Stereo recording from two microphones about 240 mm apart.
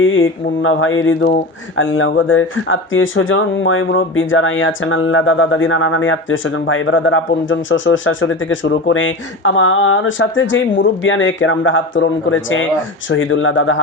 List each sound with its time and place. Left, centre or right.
0.0 s speech: left